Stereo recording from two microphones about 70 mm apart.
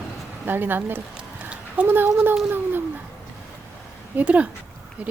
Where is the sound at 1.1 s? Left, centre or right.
Centre.